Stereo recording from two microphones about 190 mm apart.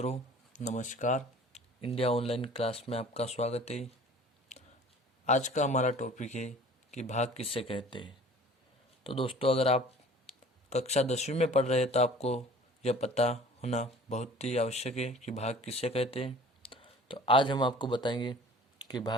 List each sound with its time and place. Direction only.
0.0 s speech: 35° left (ahead or behind)
5.2 s speech: 40° left (ahead or behind); by 19.1 s 20° left (ahead or behind)